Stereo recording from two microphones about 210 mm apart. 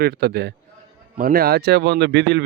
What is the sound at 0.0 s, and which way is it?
A man's voice, 50° right (ahead or behind).